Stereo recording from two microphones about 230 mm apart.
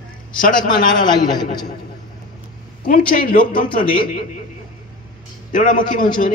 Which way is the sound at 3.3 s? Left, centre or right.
Left.